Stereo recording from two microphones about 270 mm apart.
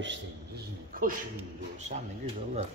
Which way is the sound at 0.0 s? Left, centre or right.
Right.